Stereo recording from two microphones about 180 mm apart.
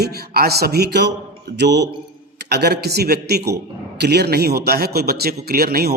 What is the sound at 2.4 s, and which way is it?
A man's voice, 65° right (ahead or behind).